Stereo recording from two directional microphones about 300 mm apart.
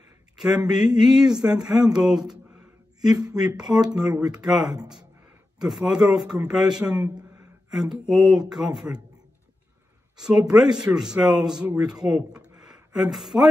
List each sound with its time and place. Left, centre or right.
0.4 s speech: centre
3.0 s speech: centre
3.3 s a man's voice: centre
10.1 s speech: centre